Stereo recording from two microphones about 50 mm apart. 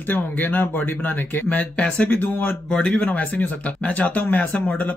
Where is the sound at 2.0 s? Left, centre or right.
Left.